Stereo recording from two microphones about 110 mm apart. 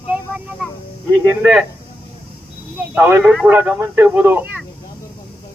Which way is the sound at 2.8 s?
15° right (ahead or behind).